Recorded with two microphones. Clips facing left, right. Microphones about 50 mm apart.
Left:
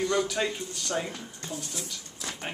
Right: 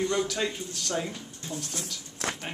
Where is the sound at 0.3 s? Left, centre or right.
Centre.